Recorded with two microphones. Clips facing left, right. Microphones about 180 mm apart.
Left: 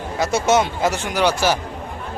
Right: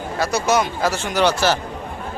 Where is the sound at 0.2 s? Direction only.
25° left (ahead or behind).